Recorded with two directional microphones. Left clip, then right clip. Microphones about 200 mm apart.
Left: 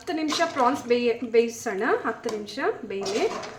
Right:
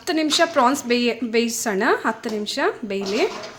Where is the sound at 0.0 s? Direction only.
50° right (ahead or behind).